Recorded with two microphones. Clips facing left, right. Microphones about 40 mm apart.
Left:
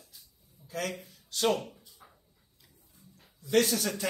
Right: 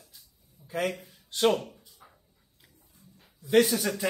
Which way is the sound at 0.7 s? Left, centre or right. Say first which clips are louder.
Right 5 dB; right.